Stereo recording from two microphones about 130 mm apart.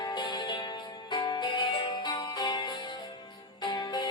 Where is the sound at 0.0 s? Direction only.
35° left (ahead or behind).